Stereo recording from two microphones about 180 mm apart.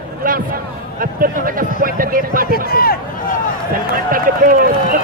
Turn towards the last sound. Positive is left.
turn(degrees=-55)  # may be behind; listen again after turning